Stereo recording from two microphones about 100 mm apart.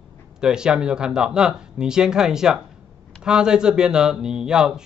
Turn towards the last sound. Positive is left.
turn(degrees=-5)  # may be behind; listen again after turning